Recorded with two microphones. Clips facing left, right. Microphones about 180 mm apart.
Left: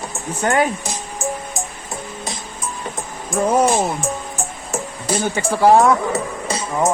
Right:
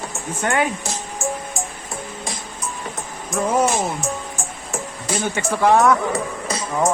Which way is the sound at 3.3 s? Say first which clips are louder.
Left 3 dB; 35° left (ahead or behind).